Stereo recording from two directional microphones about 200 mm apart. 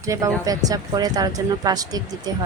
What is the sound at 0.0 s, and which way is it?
Speech, 15° right (ahead or behind).